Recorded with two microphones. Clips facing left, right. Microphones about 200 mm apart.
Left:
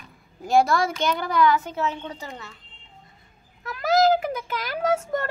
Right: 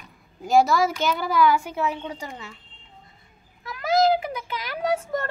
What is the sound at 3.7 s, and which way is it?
Speech, 40° left (ahead or behind).